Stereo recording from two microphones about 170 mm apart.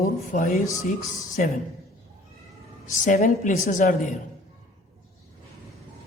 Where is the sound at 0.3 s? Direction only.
50° left (ahead or behind).